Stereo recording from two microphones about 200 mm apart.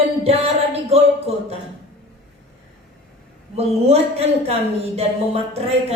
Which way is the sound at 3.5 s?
30° right (ahead or behind).